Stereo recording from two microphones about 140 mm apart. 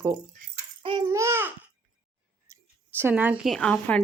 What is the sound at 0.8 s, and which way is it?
Speech, 35° right (ahead or behind).